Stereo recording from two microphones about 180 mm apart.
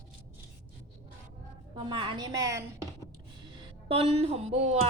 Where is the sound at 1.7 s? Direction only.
30° right (ahead or behind).